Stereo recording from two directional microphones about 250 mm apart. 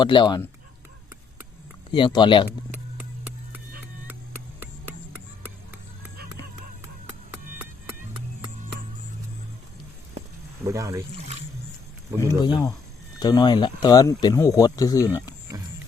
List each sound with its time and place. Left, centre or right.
0.0 s speech: centre
1.9 s speech: centre
10.6 s speech: centre
12.4 s speech: centre